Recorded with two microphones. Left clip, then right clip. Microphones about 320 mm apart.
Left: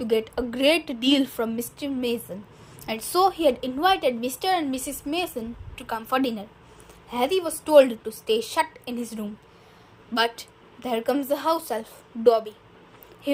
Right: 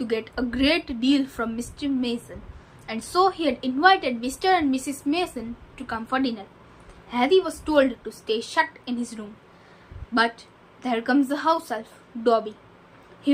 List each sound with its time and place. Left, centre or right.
0.0 s a woman's voice: left